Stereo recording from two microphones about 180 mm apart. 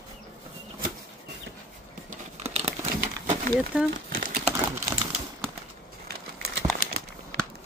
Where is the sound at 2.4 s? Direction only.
35° right (ahead or behind).